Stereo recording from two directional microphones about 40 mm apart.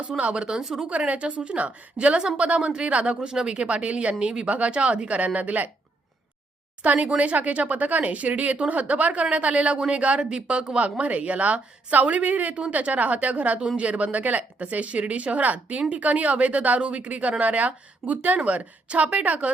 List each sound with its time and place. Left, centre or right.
0.3 s a woman's voice: right
0.6 s speech: centre
0.9 s a woman's voice: right
4.4 s a woman's voice: right
6.8 s a woman's voice: right